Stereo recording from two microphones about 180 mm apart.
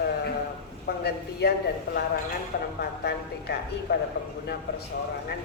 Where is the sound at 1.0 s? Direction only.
65° left (ahead or behind).